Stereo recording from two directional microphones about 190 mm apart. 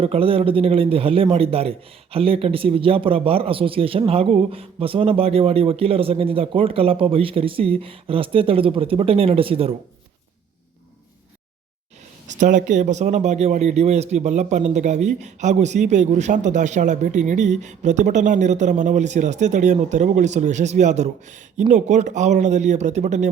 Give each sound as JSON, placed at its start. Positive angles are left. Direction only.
{"t": 0.0, "sound": "speech", "side_deg": -30}
{"t": 12.3, "sound": "speech", "side_deg": -40}